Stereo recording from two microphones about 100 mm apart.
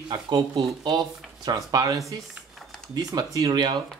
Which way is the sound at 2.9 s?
40° right (ahead or behind).